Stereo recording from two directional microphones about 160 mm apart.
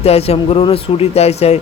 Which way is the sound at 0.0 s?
40° left (ahead or behind).